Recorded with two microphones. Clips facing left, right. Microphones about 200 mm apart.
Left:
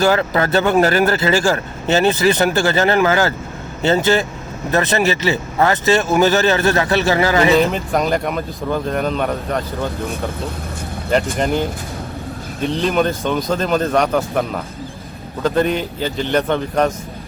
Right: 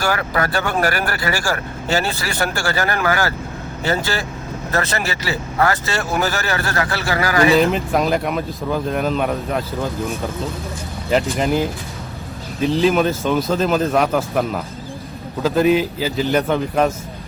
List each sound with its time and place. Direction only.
0.0 s speech: 25° left (ahead or behind)
7.5 s speech: centre (ahead or behind)
11.3 s speech: centre (ahead or behind)